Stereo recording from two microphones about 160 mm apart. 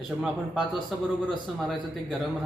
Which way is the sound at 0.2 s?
5° right (ahead or behind).